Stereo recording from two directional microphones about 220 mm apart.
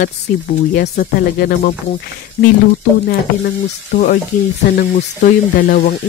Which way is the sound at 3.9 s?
35° left (ahead or behind).